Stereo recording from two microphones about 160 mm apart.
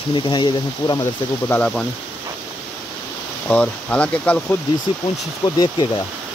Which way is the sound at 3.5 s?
10° left (ahead or behind).